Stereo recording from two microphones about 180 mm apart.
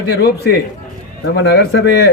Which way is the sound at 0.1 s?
65° left (ahead or behind).